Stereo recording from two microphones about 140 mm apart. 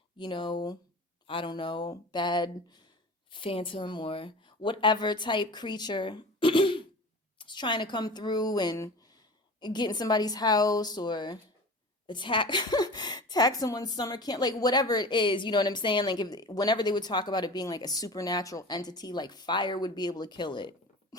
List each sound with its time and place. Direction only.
0.2 s a woman's voice: 35° left (ahead or behind)